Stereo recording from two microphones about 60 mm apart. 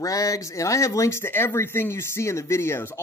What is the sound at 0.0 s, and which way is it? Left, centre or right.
Speech, left.